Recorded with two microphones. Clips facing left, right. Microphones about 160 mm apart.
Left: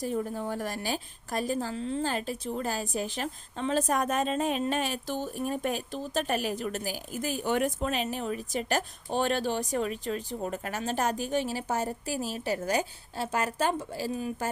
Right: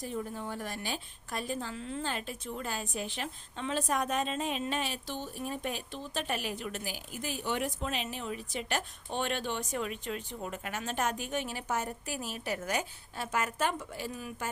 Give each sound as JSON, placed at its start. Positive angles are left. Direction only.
{"t": 0.0, "sound": "a woman's voice", "side_deg": 45}